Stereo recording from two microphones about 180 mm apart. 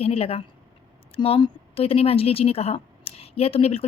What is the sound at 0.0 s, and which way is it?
A woman's voice, 35° left (ahead or behind).